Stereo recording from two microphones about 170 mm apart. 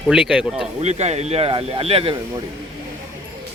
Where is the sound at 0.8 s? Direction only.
40° right (ahead or behind).